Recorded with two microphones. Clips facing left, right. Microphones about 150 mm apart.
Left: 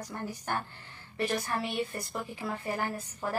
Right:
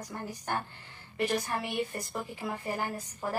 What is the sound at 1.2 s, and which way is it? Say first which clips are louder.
A woman's voice: right 1 dB; 15° right (ahead or behind).